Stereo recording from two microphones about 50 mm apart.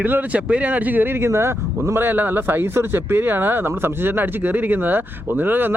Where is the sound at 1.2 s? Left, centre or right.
Right.